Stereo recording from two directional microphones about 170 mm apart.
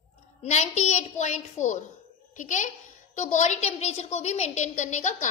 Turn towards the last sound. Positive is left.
turn(degrees=45)  # may be behind; listen again after turning